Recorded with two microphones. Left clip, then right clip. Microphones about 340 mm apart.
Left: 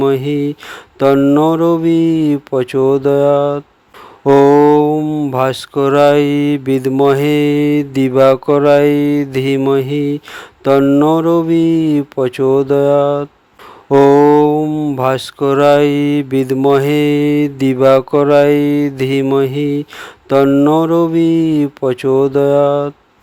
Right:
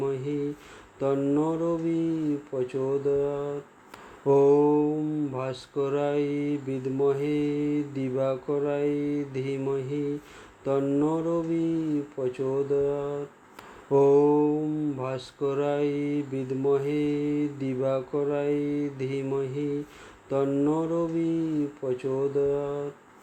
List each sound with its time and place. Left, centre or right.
0.0 s speech: left